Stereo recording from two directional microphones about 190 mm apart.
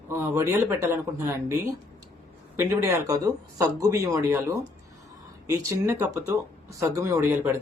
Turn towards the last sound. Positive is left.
turn(degrees=-15)  # may be behind; listen again after turning